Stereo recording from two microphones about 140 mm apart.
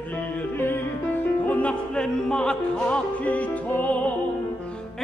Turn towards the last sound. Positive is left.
turn(degrees=10)  # may be behind; listen again after turning